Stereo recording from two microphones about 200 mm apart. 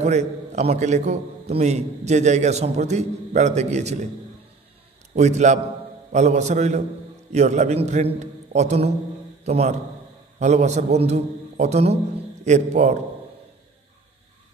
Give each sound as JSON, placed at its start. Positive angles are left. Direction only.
{"t": 0.0, "sound": "a man's voice", "side_deg": -35}
{"t": 5.1, "sound": "a man's voice", "side_deg": -35}